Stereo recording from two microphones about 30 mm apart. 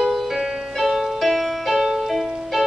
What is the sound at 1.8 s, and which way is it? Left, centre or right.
Music, centre.